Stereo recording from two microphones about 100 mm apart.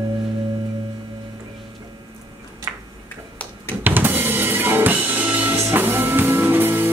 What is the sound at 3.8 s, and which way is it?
Drum kit, 20° right (ahead or behind).